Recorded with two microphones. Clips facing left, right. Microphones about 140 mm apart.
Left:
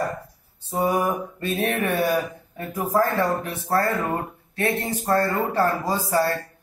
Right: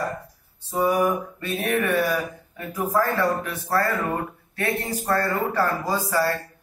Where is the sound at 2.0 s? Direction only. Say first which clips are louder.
Left 2 dB; 30° left (ahead or behind).